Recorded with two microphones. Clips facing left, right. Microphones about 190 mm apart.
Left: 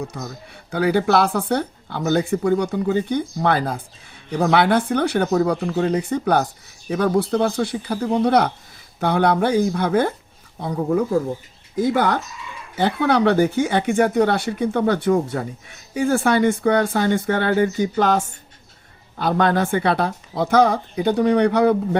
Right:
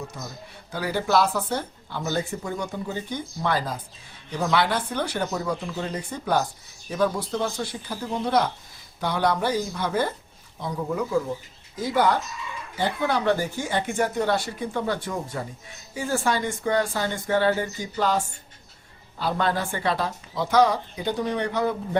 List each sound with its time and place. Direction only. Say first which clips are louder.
0.7 s speech: left 6 dB; 60° left (ahead or behind)
11.9 s speech: left 2 dB; 60° left (ahead or behind)